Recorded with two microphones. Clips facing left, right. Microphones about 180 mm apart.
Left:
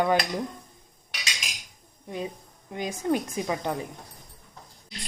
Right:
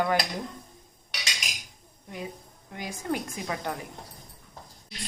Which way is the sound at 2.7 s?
20° left (ahead or behind).